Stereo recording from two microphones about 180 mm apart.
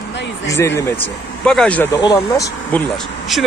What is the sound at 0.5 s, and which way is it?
Speech, 15° left (ahead or behind).